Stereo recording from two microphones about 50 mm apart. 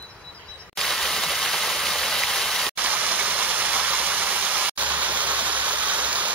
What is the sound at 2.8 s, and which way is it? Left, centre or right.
Vehicle, right.